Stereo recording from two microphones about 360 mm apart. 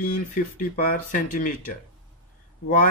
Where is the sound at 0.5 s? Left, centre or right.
Left.